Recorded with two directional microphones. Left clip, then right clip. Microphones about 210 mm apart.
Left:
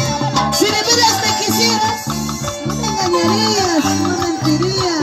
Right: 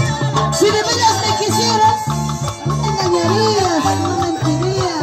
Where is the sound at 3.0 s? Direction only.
50° left (ahead or behind).